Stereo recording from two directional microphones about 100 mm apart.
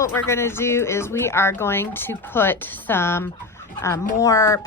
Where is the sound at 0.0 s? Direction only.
25° left (ahead or behind).